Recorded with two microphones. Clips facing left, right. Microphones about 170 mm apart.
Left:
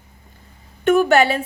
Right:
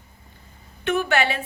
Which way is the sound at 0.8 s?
45° left (ahead or behind).